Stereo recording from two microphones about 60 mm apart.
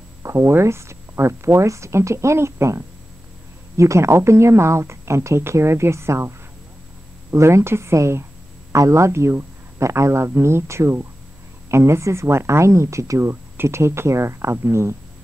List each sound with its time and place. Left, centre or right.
0.2 s speech: right